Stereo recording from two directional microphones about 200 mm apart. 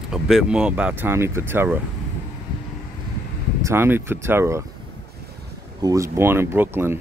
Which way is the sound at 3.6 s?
10° right (ahead or behind).